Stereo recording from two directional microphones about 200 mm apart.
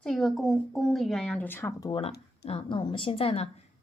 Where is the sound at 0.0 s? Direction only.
Centre (ahead or behind).